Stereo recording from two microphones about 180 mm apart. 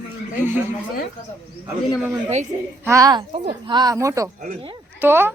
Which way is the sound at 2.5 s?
20° right (ahead or behind).